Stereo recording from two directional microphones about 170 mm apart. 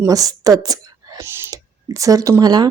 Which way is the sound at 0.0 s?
20° right (ahead or behind).